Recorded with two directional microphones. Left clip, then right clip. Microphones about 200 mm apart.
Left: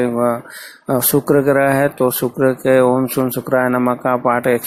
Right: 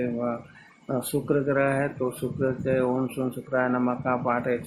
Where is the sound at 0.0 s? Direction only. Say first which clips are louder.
Left 12 dB; 30° left (ahead or behind).